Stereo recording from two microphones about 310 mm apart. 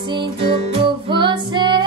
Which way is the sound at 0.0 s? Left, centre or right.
Centre.